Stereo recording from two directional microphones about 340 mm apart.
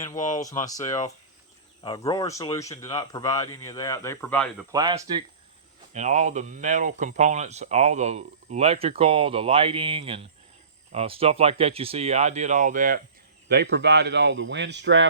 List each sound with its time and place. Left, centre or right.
0.6 s speech: centre
4.7 s speech: centre; by 15.1 s right